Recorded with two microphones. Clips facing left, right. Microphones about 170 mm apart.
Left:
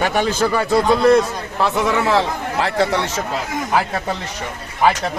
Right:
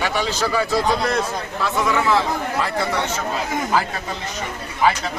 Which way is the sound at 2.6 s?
90° left.